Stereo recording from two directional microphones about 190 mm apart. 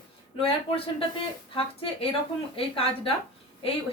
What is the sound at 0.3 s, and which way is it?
A woman's voice, 30° left (ahead or behind).